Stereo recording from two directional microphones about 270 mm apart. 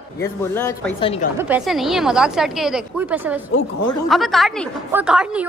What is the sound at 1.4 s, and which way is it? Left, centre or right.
Speech, centre.